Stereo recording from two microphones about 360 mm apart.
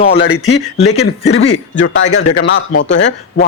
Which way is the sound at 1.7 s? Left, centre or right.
Left.